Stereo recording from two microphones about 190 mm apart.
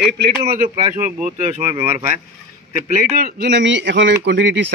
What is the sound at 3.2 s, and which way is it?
Speech, 55° right (ahead or behind).